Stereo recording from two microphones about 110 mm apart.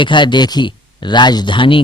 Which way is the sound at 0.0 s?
45° left (ahead or behind).